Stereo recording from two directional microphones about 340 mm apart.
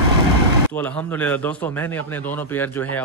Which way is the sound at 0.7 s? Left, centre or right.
Centre.